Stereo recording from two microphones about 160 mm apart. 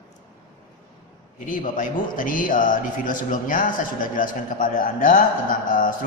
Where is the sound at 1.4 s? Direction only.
55° left (ahead or behind).